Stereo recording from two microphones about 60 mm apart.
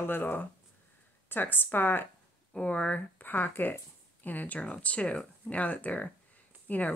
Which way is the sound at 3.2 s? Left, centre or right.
Left.